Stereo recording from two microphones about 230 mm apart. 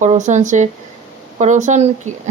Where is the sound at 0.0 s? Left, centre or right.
Right.